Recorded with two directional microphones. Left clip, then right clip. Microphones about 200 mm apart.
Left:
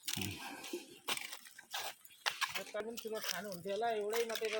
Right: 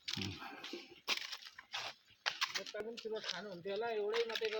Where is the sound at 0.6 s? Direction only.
45° left (ahead or behind).